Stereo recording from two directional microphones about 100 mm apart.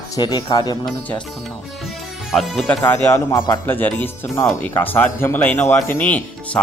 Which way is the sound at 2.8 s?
30° left (ahead or behind).